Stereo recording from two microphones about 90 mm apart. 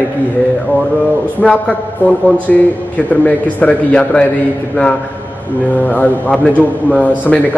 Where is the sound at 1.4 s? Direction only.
15° left (ahead or behind).